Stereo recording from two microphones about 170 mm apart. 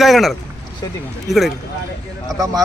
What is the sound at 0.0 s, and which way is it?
Speech, centre (ahead or behind).